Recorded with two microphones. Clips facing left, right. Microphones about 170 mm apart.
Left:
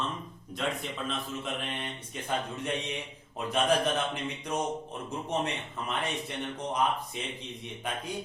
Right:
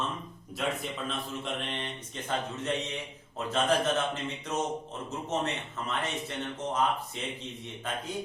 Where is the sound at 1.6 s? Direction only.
10° left (ahead or behind).